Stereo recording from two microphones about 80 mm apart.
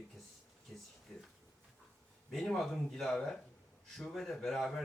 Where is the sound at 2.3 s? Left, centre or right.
Centre.